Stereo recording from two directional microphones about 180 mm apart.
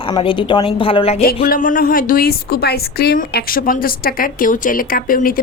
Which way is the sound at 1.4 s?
50° left (ahead or behind).